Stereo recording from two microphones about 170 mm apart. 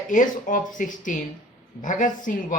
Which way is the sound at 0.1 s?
50° left (ahead or behind).